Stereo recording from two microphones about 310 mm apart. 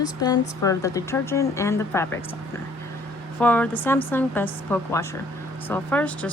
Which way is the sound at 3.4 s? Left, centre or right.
Centre.